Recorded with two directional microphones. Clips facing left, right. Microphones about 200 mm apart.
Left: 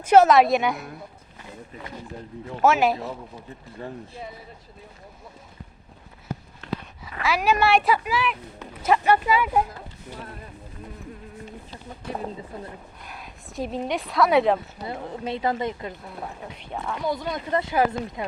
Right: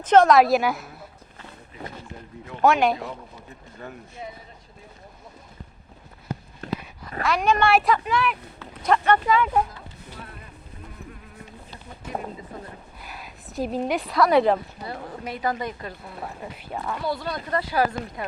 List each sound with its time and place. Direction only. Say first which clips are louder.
0.0 s speech: even; 10° left (ahead or behind)
2.6 s speech: even; 5° left (ahead or behind)
3.8 s speech: left 4 dB; 30° left (ahead or behind)
6.6 s a sound: right 1 dB; 45° right (ahead or behind)
7.2 s speech: even; 5° left (ahead or behind)
13.0 s a woman's voice: even; 5° right (ahead or behind)
15.2 s speech: left 2 dB; 25° left (ahead or behind)
16.0 s speech: even; centre (ahead or behind)
17.1 s speech: left 2 dB; 20° left (ahead or behind)